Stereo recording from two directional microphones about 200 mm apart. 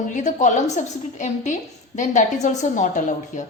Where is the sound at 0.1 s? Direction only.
40° left (ahead or behind).